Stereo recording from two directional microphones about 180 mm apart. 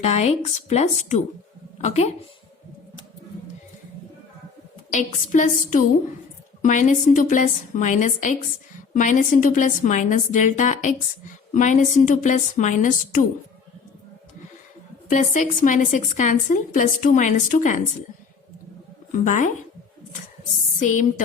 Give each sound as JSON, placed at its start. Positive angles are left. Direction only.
{"t": 0.0, "sound": "a woman's voice", "side_deg": 35}
{"t": 4.9, "sound": "a woman's voice", "side_deg": 45}
{"t": 15.1, "sound": "a woman's voice", "side_deg": 45}
{"t": 19.1, "sound": "a woman's voice", "side_deg": 40}
{"t": 20.7, "sound": "a woman's voice", "side_deg": 45}